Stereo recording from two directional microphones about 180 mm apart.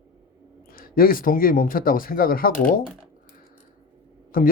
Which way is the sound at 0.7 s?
55° left (ahead or behind).